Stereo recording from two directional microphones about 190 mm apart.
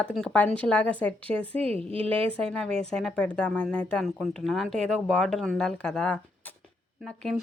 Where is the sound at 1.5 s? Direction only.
30° right (ahead or behind).